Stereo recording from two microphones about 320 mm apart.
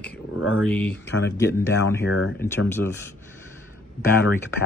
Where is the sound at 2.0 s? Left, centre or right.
Left.